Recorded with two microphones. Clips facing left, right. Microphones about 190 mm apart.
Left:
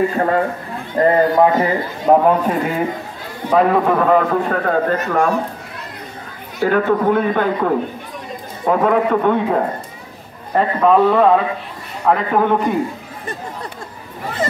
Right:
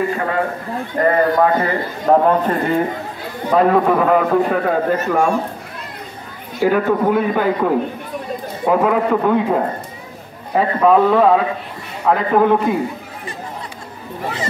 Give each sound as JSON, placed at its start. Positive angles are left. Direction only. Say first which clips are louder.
{"t": 0.9, "sound": "a man's voice", "louder": "left 2 dB", "side_deg": 20}
{"t": 6.6, "sound": "a man's voice", "louder": "even", "side_deg": -10}